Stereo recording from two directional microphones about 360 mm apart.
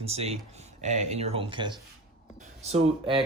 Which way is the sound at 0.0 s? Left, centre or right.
Centre.